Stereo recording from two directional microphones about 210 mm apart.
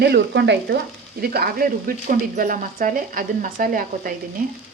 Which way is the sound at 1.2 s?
45° right (ahead or behind).